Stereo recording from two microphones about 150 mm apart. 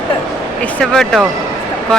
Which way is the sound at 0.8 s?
5° left (ahead or behind).